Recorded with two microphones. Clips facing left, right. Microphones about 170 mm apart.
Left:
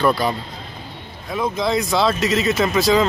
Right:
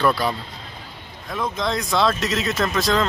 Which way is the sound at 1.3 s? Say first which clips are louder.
Left 4 dB; 5° left (ahead or behind).